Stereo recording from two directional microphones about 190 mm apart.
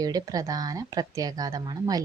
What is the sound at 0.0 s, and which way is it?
Speech, 20° right (ahead or behind).